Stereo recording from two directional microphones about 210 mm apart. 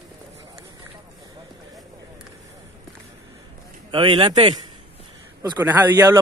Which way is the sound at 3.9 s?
25° right (ahead or behind).